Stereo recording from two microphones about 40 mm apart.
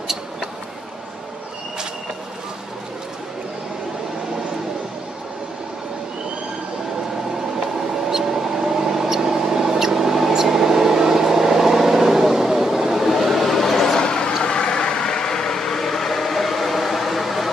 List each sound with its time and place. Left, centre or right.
7.6 s vehicle: centre
13.9 s vehicle: centre